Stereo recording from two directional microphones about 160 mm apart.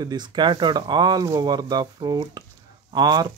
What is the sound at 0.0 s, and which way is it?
Speech, 25° right (ahead or behind).